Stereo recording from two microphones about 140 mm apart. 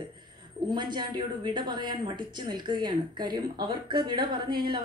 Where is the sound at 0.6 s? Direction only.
30° right (ahead or behind).